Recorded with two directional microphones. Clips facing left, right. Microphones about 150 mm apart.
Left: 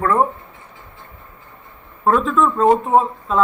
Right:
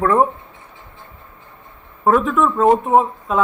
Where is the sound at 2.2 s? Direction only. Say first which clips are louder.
Even; 15° right (ahead or behind).